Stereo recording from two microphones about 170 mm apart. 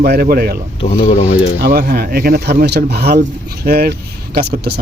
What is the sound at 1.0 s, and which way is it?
Speech, 40° left (ahead or behind).